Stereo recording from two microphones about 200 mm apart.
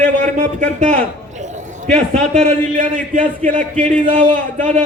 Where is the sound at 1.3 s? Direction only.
35° right (ahead or behind).